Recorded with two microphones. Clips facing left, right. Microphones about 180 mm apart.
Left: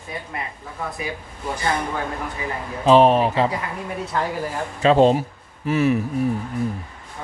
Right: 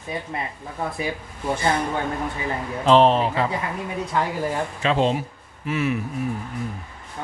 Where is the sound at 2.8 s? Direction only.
10° left (ahead or behind).